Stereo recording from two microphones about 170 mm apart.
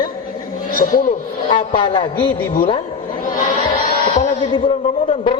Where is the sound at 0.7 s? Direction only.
55° left (ahead or behind).